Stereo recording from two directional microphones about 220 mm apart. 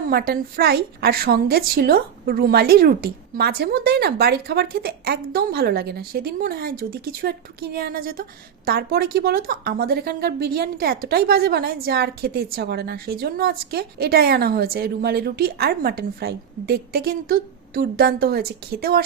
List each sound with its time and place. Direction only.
0.1 s a woman's voice: 45° right (ahead or behind)